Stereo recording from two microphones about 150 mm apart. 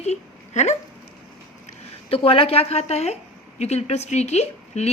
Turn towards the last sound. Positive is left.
turn(degrees=45)  # may be behind; listen again after turning